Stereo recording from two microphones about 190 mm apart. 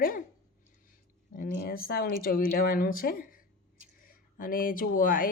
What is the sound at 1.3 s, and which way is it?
Speech, 50° left (ahead or behind).